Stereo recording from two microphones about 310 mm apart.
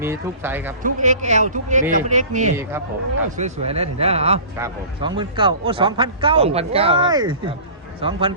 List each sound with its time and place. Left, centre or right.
0.0 s a man's voice: centre
0.8 s a man's voice: right